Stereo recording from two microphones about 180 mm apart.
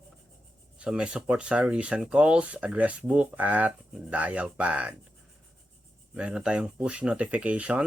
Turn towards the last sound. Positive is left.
turn(degrees=-10)  # may be behind; listen again after turning